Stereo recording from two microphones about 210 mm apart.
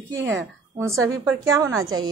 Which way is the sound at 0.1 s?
10° right (ahead or behind).